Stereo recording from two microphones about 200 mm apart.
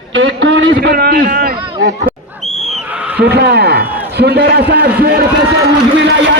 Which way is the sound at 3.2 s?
55° right (ahead or behind).